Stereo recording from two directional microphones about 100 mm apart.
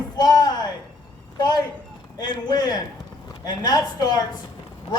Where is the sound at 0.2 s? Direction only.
40° left (ahead or behind).